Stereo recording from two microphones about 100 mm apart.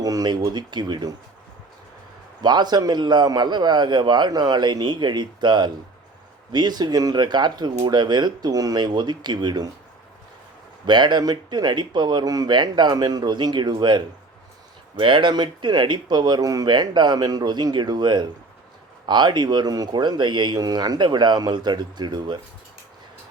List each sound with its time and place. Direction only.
0.0 s a man's voice: 40° right (ahead or behind)
2.4 s a man's voice: 45° right (ahead or behind)
10.8 s a man's voice: 50° right (ahead or behind)